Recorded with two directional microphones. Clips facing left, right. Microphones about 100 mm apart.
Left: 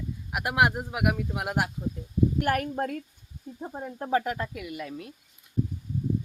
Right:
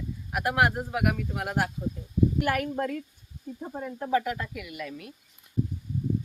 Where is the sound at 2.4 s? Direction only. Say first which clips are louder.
Left 1 dB; 45° left (ahead or behind).